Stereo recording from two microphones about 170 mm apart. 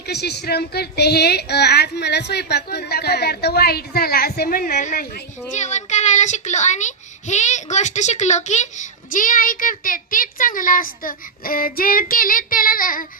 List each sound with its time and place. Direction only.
0.0 s a woman's voice: 75° left (ahead or behind); by 13.1 s 55° left (ahead or behind)